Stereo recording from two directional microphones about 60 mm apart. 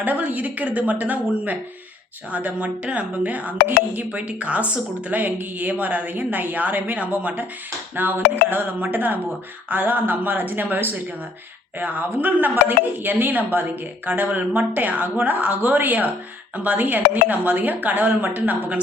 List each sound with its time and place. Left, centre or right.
0.0 s speech: right